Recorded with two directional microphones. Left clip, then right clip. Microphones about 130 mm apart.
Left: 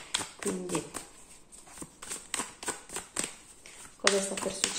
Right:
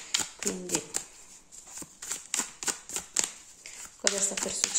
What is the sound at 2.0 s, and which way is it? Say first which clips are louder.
Clip-clop: right 3 dB; 25° right (ahead or behind).